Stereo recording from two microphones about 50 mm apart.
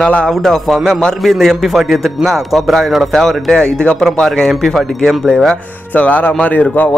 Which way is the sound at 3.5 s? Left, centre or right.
Centre.